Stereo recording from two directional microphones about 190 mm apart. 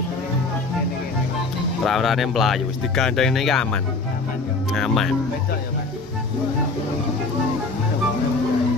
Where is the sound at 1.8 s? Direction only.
Centre (ahead or behind).